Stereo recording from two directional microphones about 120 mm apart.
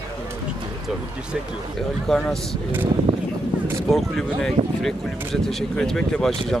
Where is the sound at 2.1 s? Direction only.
5° left (ahead or behind).